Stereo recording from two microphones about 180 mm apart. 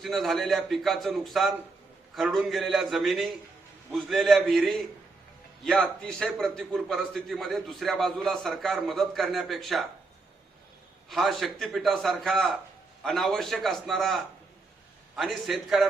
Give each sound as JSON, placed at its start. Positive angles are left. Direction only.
{"t": 0.0, "sound": "a man's voice", "side_deg": 0}
{"t": 6.0, "sound": "a man's voice", "side_deg": 5}
{"t": 11.1, "sound": "a man's voice", "side_deg": 0}